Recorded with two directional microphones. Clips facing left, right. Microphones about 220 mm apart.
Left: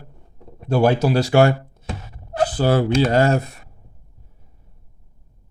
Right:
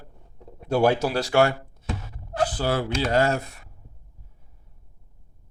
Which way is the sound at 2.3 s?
20° left (ahead or behind).